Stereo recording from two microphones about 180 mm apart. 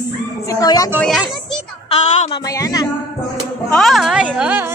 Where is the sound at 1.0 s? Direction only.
5° left (ahead or behind).